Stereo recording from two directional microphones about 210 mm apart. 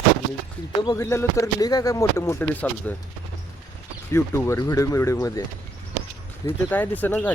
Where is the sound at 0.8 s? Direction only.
15° left (ahead or behind).